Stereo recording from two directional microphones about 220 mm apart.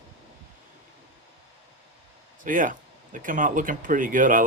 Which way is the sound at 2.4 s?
35° right (ahead or behind).